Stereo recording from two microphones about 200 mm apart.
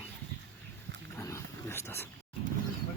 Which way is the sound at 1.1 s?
15° left (ahead or behind).